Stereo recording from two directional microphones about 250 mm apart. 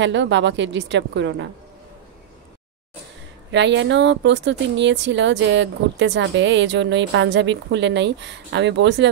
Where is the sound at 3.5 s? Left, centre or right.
Right.